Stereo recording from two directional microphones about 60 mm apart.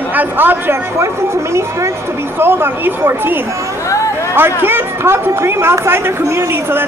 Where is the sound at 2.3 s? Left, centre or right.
Right.